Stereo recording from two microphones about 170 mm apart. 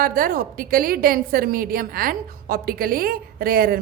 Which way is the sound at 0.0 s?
55° right (ahead or behind).